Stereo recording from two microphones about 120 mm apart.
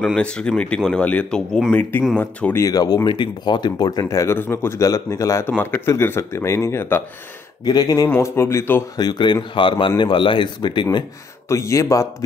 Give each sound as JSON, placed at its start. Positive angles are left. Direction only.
{"t": 0.0, "sound": "speech", "side_deg": 10}
{"t": 2.6, "sound": "speech", "side_deg": 30}
{"t": 3.1, "sound": "speech", "side_deg": 40}
{"t": 5.5, "sound": "speech", "side_deg": 15}
{"t": 7.6, "sound": "a man's voice", "side_deg": 35}
{"t": 8.1, "sound": "speech", "side_deg": 20}
{"t": 8.9, "sound": "a man's voice", "side_deg": 35}
{"t": 11.4, "sound": "speech", "side_deg": 25}